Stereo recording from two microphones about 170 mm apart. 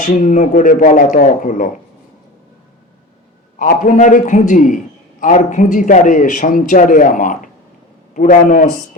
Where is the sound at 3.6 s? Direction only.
50° left (ahead or behind).